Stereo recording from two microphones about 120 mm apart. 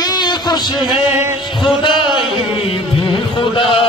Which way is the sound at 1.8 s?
40° left (ahead or behind).